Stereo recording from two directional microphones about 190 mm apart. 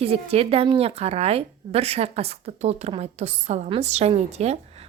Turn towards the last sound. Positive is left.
turn(degrees=-35)  # may be behind; listen again after turning